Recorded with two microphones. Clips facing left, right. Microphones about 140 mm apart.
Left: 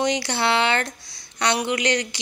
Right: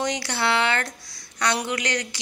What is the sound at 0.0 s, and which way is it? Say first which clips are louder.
Speech: left 3 dB; 20° left (ahead or behind).